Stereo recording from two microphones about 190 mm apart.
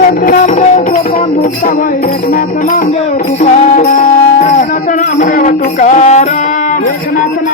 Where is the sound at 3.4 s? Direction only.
40° left (ahead or behind).